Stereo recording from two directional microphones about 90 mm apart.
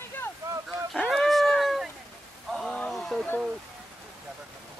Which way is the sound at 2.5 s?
Centre (ahead or behind).